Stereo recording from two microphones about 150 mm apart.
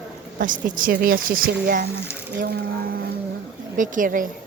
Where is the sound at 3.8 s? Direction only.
60° right (ahead or behind).